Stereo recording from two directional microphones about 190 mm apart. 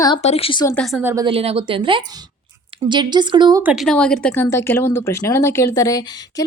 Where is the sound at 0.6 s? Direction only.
10° left (ahead or behind).